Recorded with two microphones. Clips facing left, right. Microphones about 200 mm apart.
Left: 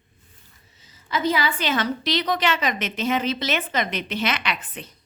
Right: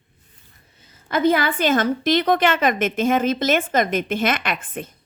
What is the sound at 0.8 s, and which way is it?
A woman's voice, 55° right (ahead or behind).